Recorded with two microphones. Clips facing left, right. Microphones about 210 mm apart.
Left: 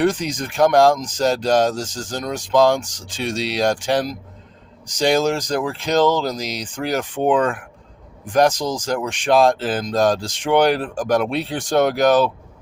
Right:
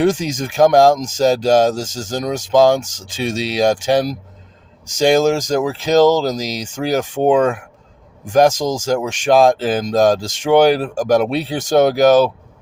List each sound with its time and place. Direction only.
0.1 s speech: 45° right (ahead or behind)